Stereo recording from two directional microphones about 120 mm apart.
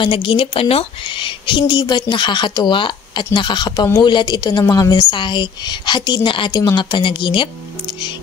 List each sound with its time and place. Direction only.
0.0 s a woman's voice: 45° left (ahead or behind)